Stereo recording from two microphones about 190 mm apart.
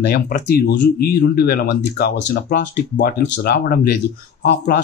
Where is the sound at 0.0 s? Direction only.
50° left (ahead or behind).